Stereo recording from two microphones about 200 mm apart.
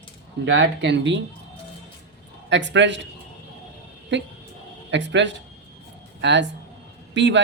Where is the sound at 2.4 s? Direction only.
65° right (ahead or behind).